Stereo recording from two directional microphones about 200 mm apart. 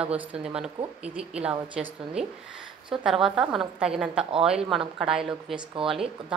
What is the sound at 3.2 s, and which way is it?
Speech, centre (ahead or behind).